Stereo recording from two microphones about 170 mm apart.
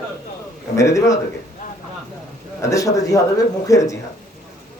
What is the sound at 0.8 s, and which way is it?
Speech, 20° left (ahead or behind).